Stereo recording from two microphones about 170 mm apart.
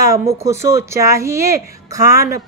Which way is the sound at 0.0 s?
20° right (ahead or behind).